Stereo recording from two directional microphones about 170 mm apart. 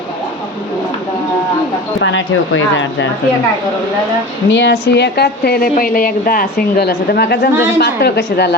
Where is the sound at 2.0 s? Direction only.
90° left.